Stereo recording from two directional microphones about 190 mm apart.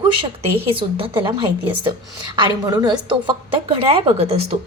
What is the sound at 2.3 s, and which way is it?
A woman's voice, 25° right (ahead or behind).